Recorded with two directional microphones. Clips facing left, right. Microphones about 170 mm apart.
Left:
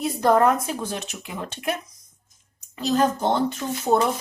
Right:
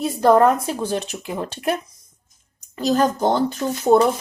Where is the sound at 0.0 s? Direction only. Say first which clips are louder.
Right 4 dB; 30° right (ahead or behind).